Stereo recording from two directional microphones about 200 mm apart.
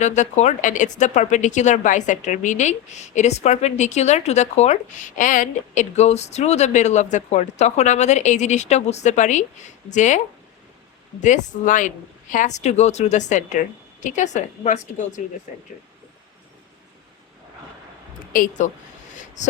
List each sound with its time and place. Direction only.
0.0 s speech: 35° left (ahead or behind)
11.2 s speech: 40° left (ahead or behind)
18.3 s speech: 40° left (ahead or behind)
19.1 s a sound: 40° left (ahead or behind)